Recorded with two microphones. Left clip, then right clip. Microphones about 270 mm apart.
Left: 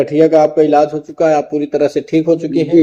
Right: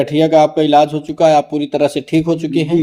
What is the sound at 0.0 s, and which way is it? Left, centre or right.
A man's voice, right.